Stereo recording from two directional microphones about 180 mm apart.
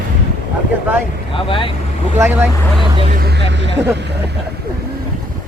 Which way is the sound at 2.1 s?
15° right (ahead or behind).